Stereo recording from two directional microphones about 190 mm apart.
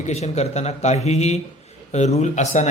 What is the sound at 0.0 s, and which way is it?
A man's voice, 35° left (ahead or behind).